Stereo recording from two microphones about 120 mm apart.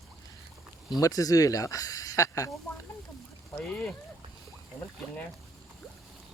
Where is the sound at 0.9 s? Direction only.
30° left (ahead or behind).